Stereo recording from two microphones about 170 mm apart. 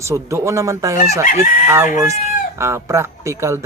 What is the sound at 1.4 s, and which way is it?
Chicken, 55° left (ahead or behind).